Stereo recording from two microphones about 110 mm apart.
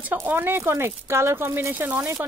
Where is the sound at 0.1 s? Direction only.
20° right (ahead or behind).